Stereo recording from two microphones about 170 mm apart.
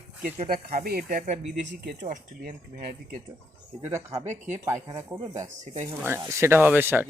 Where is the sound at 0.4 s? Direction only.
60° right (ahead or behind).